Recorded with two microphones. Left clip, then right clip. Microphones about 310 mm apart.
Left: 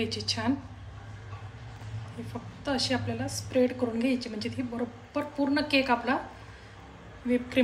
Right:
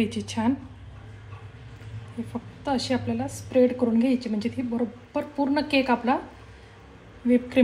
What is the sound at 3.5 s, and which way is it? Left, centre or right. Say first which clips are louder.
Speech: right 6 dB; centre.